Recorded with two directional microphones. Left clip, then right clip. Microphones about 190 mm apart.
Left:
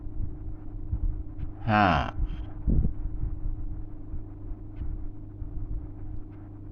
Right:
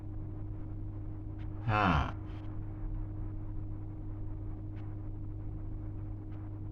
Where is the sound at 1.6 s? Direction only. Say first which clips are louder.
Left 7 dB; 50° left (ahead or behind).